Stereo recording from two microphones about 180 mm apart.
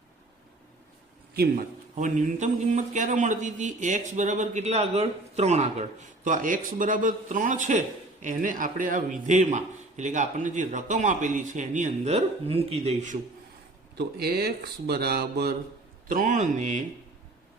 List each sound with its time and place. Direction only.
2.0 s a man's voice: 45° right (ahead or behind)
13.9 s speech: 65° right (ahead or behind)
16.0 s a man's voice: 45° right (ahead or behind)